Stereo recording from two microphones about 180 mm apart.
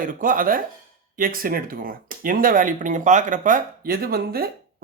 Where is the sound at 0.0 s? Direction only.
50° right (ahead or behind).